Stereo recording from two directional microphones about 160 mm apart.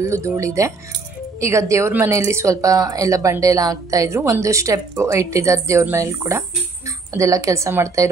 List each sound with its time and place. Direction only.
0.0 s speech: 20° right (ahead or behind)